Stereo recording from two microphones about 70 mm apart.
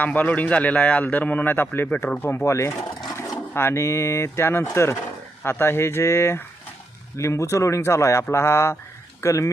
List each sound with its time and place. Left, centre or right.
0.0 s a man's voice: left